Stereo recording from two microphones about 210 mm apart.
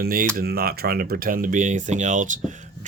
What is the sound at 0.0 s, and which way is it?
Speech, 45° right (ahead or behind).